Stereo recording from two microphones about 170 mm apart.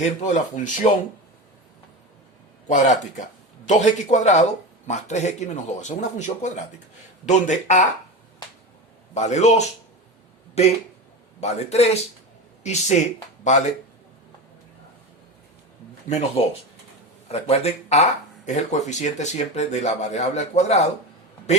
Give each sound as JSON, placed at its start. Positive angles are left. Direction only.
{"t": 0.0, "sound": "speech", "side_deg": 45}
{"t": 2.6, "sound": "speech", "side_deg": 45}
{"t": 9.1, "sound": "speech", "side_deg": 40}
{"t": 11.3, "sound": "speech", "side_deg": 40}
{"t": 16.0, "sound": "speech", "side_deg": 40}